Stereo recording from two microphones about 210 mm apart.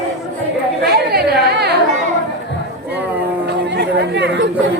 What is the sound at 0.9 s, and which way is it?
Chatter, 50° right (ahead or behind).